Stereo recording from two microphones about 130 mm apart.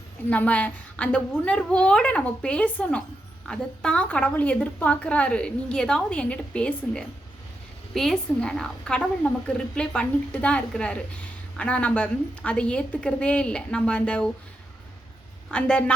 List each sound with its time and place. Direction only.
0.3 s a woman's voice: 10° left (ahead or behind)
15.4 s a woman's voice: 10° left (ahead or behind)